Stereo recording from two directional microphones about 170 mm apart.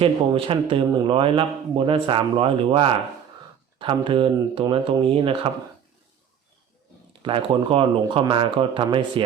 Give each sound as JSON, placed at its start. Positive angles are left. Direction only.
{"t": 0.0, "sound": "speech", "side_deg": -30}
{"t": 7.2, "sound": "speech", "side_deg": -30}